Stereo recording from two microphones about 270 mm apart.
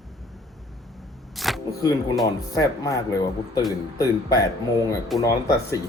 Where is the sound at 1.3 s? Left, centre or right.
Centre.